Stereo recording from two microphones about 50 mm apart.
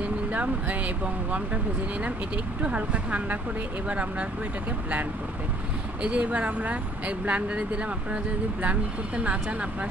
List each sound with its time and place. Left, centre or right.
0.0 s speech: right
6.0 s speech: right